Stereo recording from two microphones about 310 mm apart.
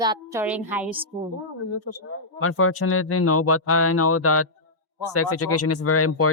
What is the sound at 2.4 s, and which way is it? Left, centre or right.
Speech, left.